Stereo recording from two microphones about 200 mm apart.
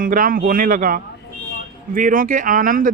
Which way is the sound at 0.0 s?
45° right (ahead or behind).